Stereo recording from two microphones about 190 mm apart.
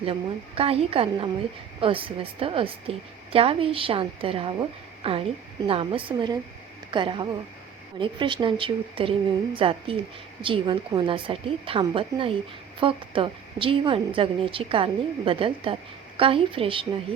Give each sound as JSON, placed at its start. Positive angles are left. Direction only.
{"t": 0.0, "sound": "a woman's voice", "side_deg": -30}